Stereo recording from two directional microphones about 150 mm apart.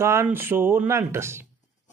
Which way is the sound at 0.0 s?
15° right (ahead or behind).